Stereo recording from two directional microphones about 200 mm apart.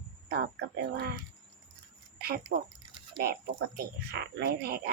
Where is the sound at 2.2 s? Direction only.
50° right (ahead or behind).